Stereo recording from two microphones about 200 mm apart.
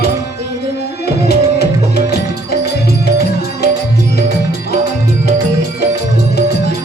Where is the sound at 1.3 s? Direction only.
55° left (ahead or behind).